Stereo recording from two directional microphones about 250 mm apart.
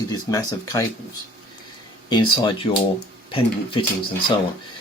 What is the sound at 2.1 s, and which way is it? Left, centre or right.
Speech, centre.